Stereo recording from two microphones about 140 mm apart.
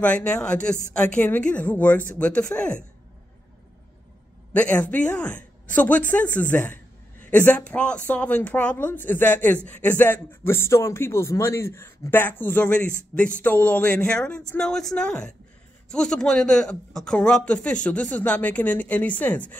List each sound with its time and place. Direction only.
0.0 s speech: 10° left (ahead or behind)
4.6 s a man's voice: 10° left (ahead or behind)